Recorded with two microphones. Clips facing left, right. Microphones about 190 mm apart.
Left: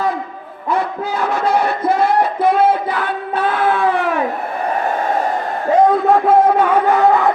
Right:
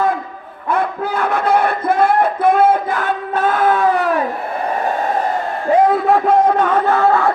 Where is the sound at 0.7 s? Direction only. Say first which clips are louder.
Right 1 dB; 55° right (ahead or behind).